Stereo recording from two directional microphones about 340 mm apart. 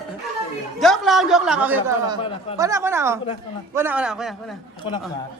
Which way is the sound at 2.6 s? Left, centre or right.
Centre.